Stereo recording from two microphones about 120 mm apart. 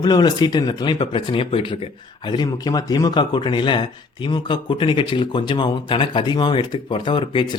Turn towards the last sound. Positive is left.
turn(degrees=45)  # may be behind; listen again after turning